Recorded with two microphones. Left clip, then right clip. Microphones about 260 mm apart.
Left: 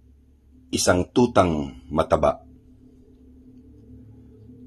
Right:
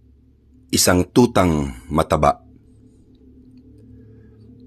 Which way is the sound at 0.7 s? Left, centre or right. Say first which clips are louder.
Right 4 dB; right.